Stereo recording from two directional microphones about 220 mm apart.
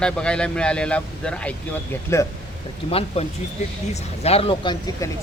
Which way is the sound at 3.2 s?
25° left (ahead or behind).